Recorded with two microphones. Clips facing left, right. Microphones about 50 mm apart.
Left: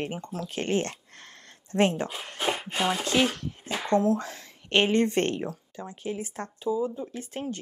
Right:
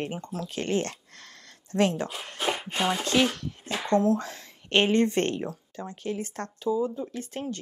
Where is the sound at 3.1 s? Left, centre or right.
Centre.